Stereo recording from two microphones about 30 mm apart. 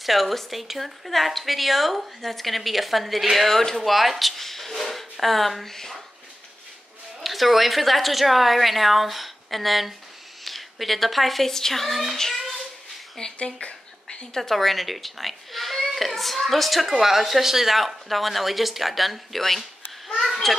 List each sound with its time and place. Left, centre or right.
0.0 s a woman's voice: centre
3.7 s a woman's voice: centre
7.2 s a woman's voice: centre
13.4 s speech: left
14.0 s a sound: centre
14.5 s a woman's voice: centre
17.7 s a woman's voice: centre
20.2 s children playing: centre